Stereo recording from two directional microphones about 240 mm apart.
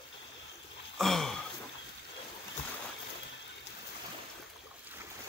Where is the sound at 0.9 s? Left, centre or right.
Centre.